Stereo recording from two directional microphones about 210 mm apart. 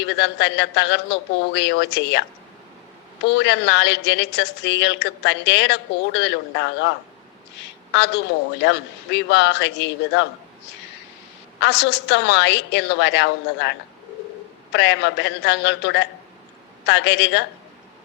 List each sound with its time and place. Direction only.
0.2 s speech: 55° left (ahead or behind)
3.3 s speech: 55° left (ahead or behind)
7.9 s a woman's voice: 55° left (ahead or behind)
11.6 s speech: 55° left (ahead or behind)
14.7 s speech: 55° left (ahead or behind)